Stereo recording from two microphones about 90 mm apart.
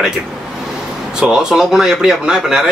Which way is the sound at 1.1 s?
5° right (ahead or behind).